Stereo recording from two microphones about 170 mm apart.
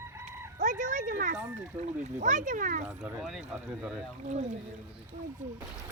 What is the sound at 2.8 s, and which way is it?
Speech, 5° right (ahead or behind).